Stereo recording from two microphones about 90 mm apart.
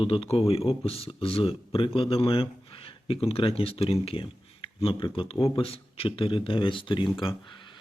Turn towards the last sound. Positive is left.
turn(degrees=70)  # may be behind; listen again after turning